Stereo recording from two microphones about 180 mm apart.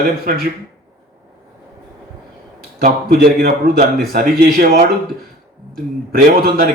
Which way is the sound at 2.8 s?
55° right (ahead or behind).